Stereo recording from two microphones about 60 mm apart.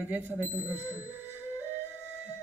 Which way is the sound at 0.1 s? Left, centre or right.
Right.